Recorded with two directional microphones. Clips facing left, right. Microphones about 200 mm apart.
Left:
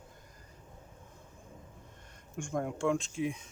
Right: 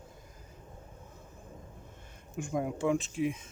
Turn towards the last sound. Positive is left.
turn(degrees=0)  # may be behind; listen again after turning